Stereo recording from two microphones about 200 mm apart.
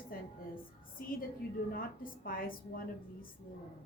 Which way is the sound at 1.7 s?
45° left (ahead or behind).